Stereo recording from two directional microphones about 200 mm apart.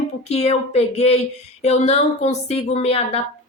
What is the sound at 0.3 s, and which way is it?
A woman's voice, 30° left (ahead or behind).